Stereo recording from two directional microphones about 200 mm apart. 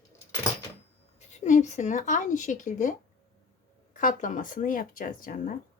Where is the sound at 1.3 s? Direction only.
35° left (ahead or behind).